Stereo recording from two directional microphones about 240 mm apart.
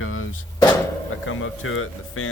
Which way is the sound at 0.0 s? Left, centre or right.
Left.